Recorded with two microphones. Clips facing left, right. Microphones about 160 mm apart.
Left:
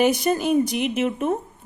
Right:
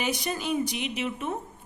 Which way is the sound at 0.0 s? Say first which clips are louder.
Left 10 dB; 50° left (ahead or behind).